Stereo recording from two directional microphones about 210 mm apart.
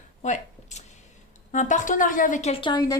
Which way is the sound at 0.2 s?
35° left (ahead or behind).